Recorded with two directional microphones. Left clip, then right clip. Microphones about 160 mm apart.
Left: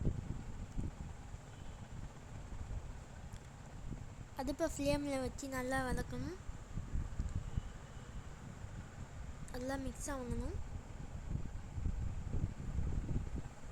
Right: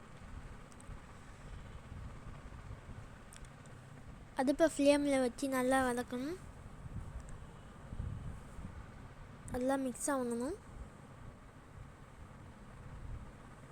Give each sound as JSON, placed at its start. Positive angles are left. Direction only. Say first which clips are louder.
{"t": 4.4, "sound": "speech", "louder": "right 8 dB", "side_deg": -10}
{"t": 9.5, "sound": "a woman's voice", "louder": "right 7 dB", "side_deg": -15}
{"t": 10.0, "sound": "speech", "louder": "right 8 dB", "side_deg": -25}